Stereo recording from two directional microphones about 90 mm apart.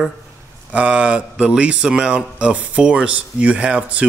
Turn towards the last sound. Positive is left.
turn(degrees=-15)  # may be behind; listen again after turning